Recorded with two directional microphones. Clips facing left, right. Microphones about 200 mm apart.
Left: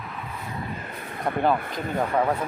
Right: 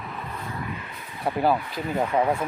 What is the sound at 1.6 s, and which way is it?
Speech, 50° left (ahead or behind).